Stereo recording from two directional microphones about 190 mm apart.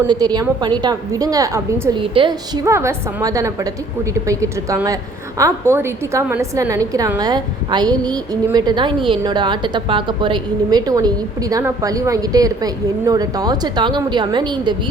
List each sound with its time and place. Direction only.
0.1 s a woman's voice: 20° right (ahead or behind)
2.0 s a woman's voice: 25° right (ahead or behind)
2.6 s a woman's voice: 15° right (ahead or behind)